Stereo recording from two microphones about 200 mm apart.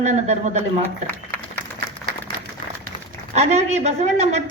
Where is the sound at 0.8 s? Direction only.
10° left (ahead or behind).